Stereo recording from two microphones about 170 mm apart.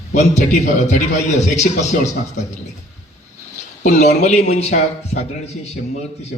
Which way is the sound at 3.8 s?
45° left (ahead or behind).